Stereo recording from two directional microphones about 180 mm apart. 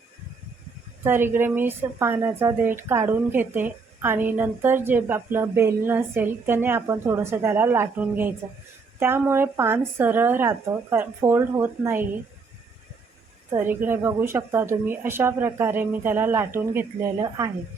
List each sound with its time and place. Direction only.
1.0 s a woman's voice: 10° right (ahead or behind)
13.5 s a woman's voice: 15° right (ahead or behind)